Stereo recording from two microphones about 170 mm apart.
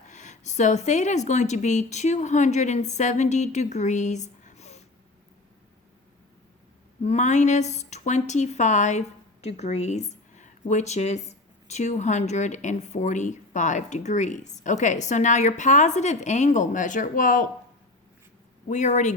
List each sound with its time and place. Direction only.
0.1 s a woman's voice: 45° left (ahead or behind)
7.0 s a woman's voice: 45° left (ahead or behind)
18.7 s a woman's voice: 45° left (ahead or behind)